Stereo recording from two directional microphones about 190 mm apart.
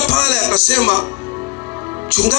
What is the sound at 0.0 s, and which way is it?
Music, 35° right (ahead or behind).